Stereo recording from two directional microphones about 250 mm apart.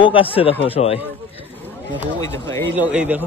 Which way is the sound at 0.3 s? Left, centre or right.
Left.